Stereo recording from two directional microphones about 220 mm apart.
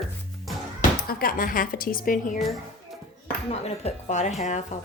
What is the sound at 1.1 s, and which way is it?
Speech, 40° left (ahead or behind).